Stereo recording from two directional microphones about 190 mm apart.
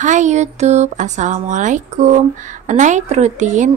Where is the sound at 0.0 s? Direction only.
40° right (ahead or behind).